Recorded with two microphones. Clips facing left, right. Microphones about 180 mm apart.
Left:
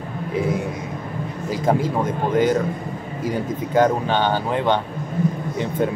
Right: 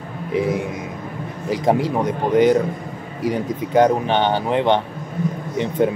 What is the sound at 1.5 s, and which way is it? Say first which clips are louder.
Speech: right 2 dB; 20° right (ahead or behind).